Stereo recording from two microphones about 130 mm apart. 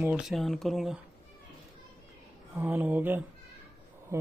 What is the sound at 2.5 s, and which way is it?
Speech, 15° right (ahead or behind).